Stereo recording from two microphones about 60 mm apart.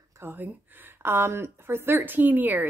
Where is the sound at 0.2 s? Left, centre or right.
Right.